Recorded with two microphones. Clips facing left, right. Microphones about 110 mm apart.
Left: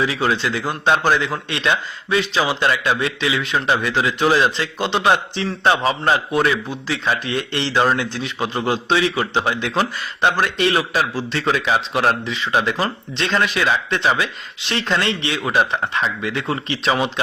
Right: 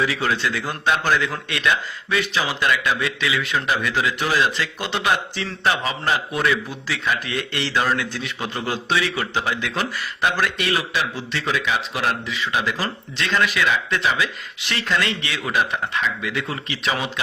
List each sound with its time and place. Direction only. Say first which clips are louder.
0.3 s a man's voice: left 3 dB; 20° left (ahead or behind)